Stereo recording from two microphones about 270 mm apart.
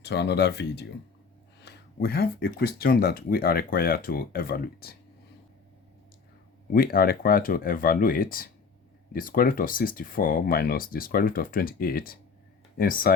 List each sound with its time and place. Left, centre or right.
0.0 s speech: left
6.7 s speech: left